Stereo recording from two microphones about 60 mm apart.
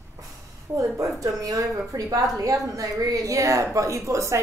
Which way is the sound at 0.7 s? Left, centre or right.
Right.